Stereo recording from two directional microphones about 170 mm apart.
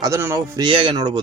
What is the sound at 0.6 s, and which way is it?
Speech, 30° right (ahead or behind).